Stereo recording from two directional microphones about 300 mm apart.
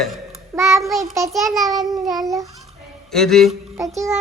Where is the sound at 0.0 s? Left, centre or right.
Centre.